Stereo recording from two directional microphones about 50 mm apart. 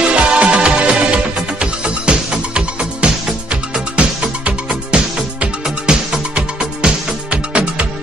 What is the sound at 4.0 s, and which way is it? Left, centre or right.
Music, centre.